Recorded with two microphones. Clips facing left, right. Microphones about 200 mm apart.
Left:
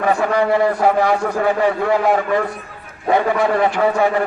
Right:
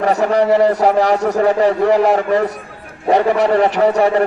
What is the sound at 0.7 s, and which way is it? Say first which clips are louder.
A man's voice: right 2 dB; 40° right (ahead or behind).